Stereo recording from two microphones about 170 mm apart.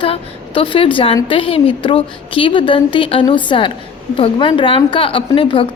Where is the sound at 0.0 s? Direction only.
30° left (ahead or behind).